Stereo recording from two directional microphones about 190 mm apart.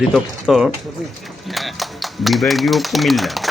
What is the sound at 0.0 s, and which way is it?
Speech, centre (ahead or behind).